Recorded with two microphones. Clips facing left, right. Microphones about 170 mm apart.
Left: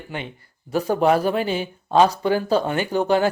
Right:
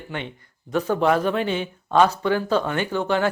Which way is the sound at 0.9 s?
10° left (ahead or behind).